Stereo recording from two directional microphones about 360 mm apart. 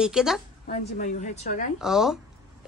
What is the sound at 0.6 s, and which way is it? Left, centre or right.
A woman's voice, left.